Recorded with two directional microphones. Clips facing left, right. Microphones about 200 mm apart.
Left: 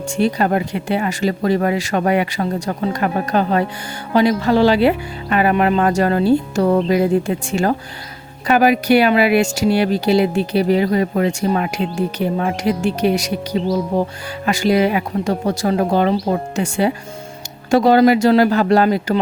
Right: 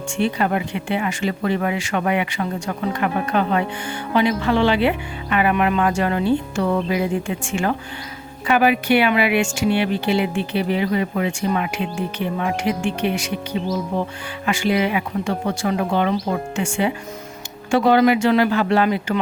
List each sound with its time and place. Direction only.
0.2 s speech: 40° left (ahead or behind)